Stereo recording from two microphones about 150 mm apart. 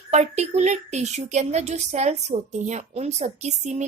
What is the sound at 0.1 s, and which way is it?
Speech, 50° right (ahead or behind).